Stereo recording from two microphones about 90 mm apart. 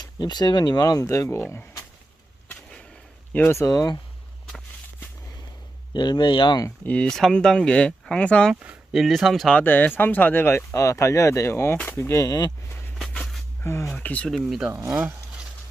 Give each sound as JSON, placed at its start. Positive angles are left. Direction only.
{"t": 0.0, "sound": "speech", "side_deg": 50}
{"t": 3.3, "sound": "speech", "side_deg": 25}
{"t": 3.7, "sound": "speech", "side_deg": 45}
{"t": 5.9, "sound": "speech", "side_deg": 55}
{"t": 6.7, "sound": "speech", "side_deg": 15}
{"t": 8.9, "sound": "speech", "side_deg": 0}
{"t": 9.6, "sound": "speech", "side_deg": 20}
{"t": 13.0, "sound": "dog", "side_deg": 5}
{"t": 13.6, "sound": "speech", "side_deg": 30}
{"t": 13.9, "sound": "speech", "side_deg": 15}
{"t": 14.3, "sound": "speech", "side_deg": 0}
{"t": 14.7, "sound": "speech", "side_deg": -30}